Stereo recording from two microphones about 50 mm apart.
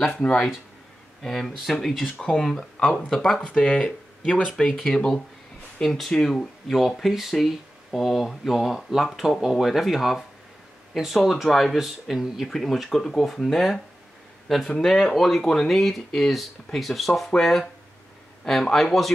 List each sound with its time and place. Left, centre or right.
1.2 s speech: centre